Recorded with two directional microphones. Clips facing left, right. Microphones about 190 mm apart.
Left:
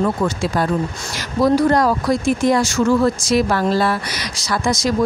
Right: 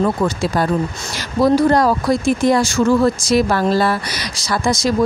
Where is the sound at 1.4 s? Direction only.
30° right (ahead or behind).